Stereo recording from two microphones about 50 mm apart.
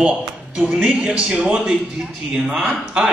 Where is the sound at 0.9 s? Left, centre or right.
Right.